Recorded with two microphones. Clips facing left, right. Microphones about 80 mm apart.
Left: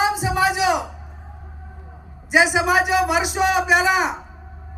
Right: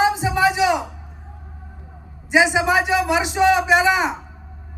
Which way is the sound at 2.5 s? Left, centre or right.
Centre.